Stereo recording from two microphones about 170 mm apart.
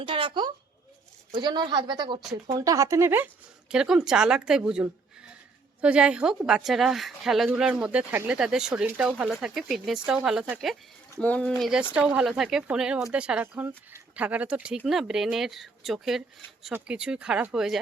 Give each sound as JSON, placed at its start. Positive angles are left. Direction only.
{"t": 0.0, "sound": "a woman's voice", "side_deg": -30}